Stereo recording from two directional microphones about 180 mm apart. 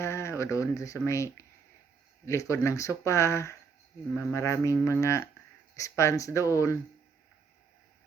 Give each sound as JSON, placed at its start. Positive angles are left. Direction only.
{"t": 0.0, "sound": "speech", "side_deg": 15}